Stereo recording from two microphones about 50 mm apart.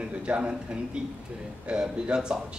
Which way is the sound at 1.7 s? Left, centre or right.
Centre.